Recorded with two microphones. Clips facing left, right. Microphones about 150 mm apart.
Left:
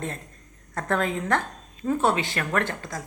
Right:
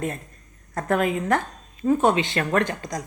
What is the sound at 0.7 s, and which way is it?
Speech, 15° right (ahead or behind).